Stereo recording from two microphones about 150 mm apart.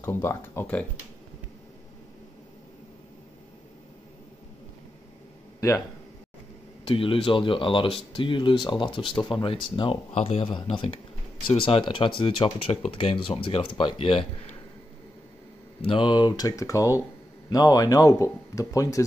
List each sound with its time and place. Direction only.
0.0 s speech: 15° left (ahead or behind)
6.8 s speech: 35° left (ahead or behind)
15.8 s a man's voice: 35° left (ahead or behind)